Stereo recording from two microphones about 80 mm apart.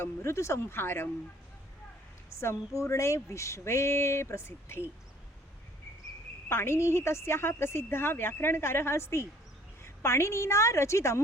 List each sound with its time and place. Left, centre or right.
0.0 s a woman's voice: left
2.4 s a woman's voice: left
6.5 s a woman's voice: left